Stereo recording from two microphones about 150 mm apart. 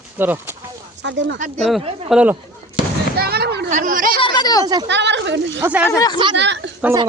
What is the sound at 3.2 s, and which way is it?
Speech, 90° right.